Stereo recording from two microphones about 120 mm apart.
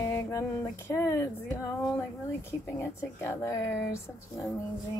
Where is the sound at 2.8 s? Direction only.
20° left (ahead or behind).